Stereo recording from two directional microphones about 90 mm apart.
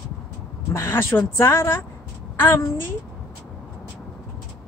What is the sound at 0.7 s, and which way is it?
Speech, 30° left (ahead or behind).